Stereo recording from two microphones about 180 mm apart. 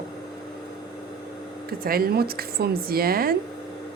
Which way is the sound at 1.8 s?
55° right (ahead or behind).